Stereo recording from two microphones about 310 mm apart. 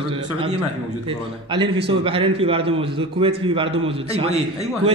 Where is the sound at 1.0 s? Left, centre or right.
Centre.